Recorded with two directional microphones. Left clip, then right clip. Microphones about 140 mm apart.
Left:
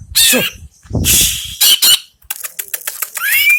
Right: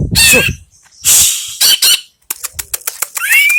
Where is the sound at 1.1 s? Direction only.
25° right (ahead or behind).